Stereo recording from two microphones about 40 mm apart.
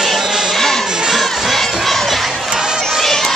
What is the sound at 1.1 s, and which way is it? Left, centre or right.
Crowd, centre.